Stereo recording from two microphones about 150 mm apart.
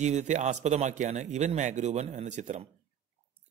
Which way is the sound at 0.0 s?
50° right (ahead or behind).